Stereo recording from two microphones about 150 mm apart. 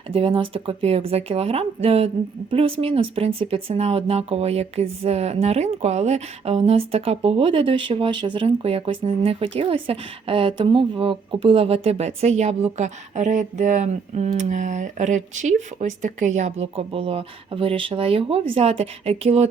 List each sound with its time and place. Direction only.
0.1 s speech: 40° right (ahead or behind)